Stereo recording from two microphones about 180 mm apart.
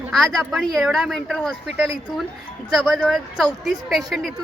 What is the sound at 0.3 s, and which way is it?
Speech, centre (ahead or behind).